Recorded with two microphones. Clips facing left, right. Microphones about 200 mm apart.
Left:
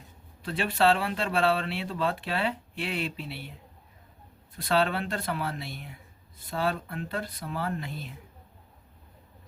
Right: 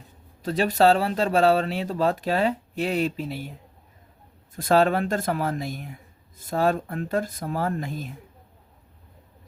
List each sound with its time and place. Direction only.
0.4 s speech: 40° right (ahead or behind)
4.5 s speech: 45° right (ahead or behind)